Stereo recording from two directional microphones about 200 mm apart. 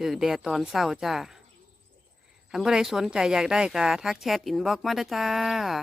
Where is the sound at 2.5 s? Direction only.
5° right (ahead or behind).